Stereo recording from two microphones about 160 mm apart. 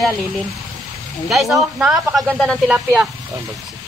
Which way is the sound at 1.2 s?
Centre (ahead or behind).